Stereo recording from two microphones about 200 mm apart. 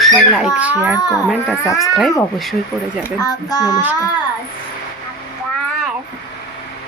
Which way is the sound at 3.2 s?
20° left (ahead or behind).